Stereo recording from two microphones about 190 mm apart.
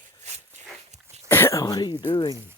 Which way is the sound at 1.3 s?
10° left (ahead or behind).